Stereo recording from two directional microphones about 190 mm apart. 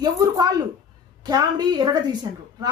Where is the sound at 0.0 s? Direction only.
20° right (ahead or behind).